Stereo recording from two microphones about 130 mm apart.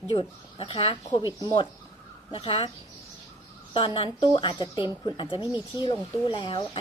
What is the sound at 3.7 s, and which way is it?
A woman's voice, 45° left (ahead or behind).